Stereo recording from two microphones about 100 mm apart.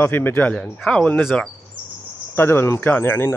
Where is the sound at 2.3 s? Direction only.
25° left (ahead or behind).